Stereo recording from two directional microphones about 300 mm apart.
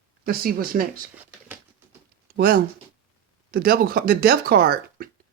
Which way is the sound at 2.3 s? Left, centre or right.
Right.